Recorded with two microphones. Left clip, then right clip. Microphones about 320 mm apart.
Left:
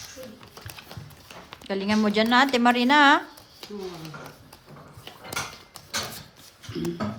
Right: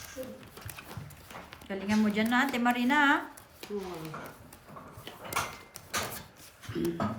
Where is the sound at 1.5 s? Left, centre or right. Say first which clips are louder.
Left 6 dB; centre.